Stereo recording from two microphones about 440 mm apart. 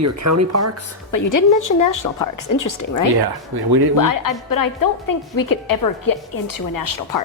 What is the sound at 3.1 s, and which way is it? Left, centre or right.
Speech, right.